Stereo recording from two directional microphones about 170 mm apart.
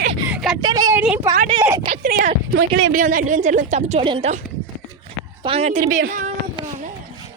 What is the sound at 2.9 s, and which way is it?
A woman's voice, 50° right (ahead or behind).